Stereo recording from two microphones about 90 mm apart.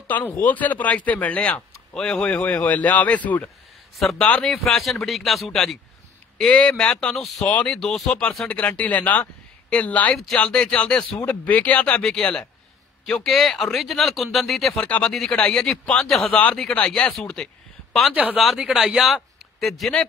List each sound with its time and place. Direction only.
0.1 s speech: 20° left (ahead or behind)
3.9 s a man's voice: centre (ahead or behind)
14.8 s speech: 15° left (ahead or behind)
16.1 s speech: 5° left (ahead or behind)
16.3 s speech: 15° left (ahead or behind)
18.1 s speech: 15° right (ahead or behind)
18.4 s a man's voice: 5° right (ahead or behind)